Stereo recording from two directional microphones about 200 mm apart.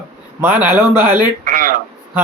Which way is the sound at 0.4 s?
5° right (ahead or behind).